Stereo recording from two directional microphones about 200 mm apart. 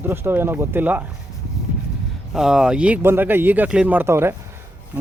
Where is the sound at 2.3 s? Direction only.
5° right (ahead or behind).